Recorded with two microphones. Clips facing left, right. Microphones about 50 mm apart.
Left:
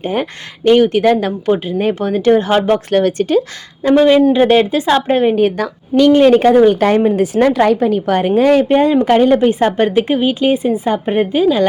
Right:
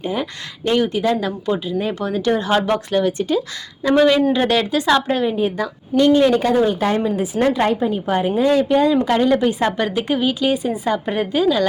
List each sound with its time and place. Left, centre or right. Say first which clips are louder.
0.0 s a woman's voice: left 5 dB; left
2.9 s speech: left 5 dB; left
3.8 s a woman's voice: left 5 dB; left
5.3 s a woman's voice: left 6 dB; left
8.4 s a woman's voice: left 5 dB; left